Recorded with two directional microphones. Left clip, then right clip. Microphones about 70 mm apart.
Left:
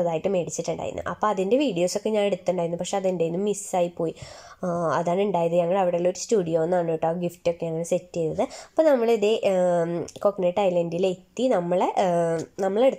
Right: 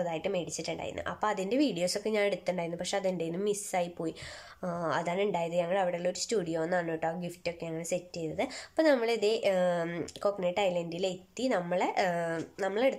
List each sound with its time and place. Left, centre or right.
0.0 s a woman's voice: left